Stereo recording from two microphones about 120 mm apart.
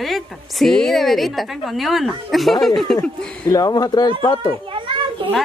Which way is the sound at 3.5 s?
30° left (ahead or behind).